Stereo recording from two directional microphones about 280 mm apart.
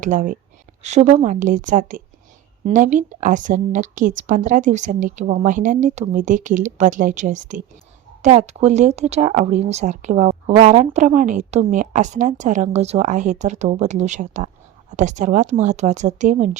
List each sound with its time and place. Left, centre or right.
0.0 s speech: right